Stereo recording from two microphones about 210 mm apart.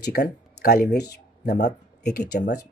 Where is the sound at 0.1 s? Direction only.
50° left (ahead or behind).